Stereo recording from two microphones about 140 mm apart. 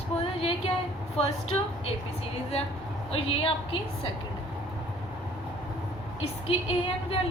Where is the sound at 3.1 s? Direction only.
40° left (ahead or behind).